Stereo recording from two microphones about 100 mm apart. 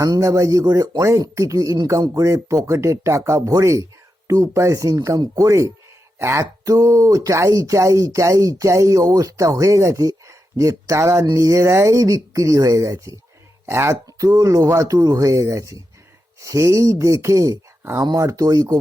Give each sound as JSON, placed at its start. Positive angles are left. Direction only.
{"t": 0.0, "sound": "speech", "side_deg": -35}
{"t": 14.3, "sound": "speech", "side_deg": -35}